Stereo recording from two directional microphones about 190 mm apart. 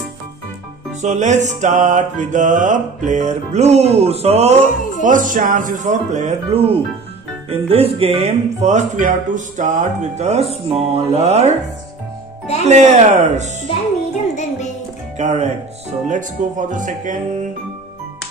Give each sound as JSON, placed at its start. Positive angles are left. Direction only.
{"t": 1.0, "sound": "music", "side_deg": -40}
{"t": 5.0, "sound": "speech", "side_deg": -45}
{"t": 7.4, "sound": "music", "side_deg": -30}
{"t": 12.6, "sound": "music", "side_deg": -35}
{"t": 14.3, "sound": "music", "side_deg": 35}
{"t": 15.1, "sound": "music", "side_deg": -40}